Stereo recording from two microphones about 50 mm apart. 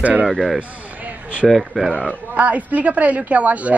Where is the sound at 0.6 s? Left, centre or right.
Right.